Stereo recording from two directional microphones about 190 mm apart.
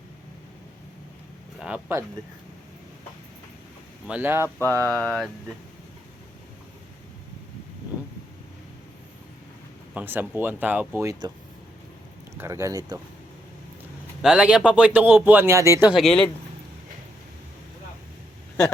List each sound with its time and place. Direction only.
1.5 s speech: 5° right (ahead or behind)
4.0 s speech: 10° right (ahead or behind)
4.4 s mantra: 10° left (ahead or behind)
9.9 s speech: 10° right (ahead or behind)
12.4 s speech: 15° right (ahead or behind)
14.2 s speech: 5° right (ahead or behind)
16.0 s speech: 5° left (ahead or behind)